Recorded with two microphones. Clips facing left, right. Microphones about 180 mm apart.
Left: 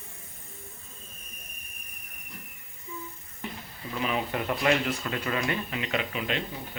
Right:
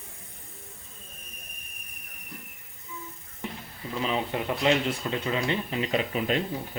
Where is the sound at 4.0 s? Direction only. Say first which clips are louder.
Right 1 dB; 25° right (ahead or behind).